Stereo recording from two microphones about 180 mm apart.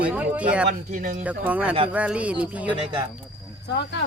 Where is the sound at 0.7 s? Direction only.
45° right (ahead or behind).